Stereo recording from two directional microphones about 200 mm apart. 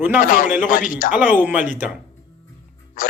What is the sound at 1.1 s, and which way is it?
Speech, 10° right (ahead or behind).